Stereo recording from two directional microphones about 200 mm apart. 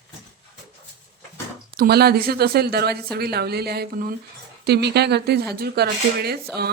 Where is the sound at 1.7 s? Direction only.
50° right (ahead or behind).